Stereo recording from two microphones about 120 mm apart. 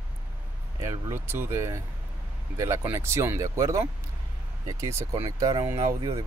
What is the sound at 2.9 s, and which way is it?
Speech, 20° right (ahead or behind).